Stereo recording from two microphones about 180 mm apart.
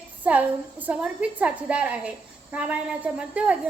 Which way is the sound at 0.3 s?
10° right (ahead or behind).